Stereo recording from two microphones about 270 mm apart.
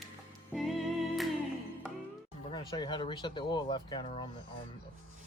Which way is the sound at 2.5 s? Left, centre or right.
Centre.